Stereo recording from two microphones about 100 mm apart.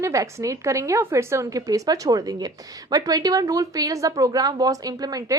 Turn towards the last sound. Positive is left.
turn(degrees=-40)  # may be behind; listen again after turning